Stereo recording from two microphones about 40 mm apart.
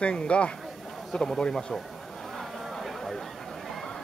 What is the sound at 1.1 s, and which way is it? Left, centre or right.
Speech, centre.